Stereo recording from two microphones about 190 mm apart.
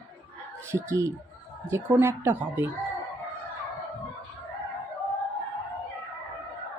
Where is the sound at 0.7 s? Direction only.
15° right (ahead or behind).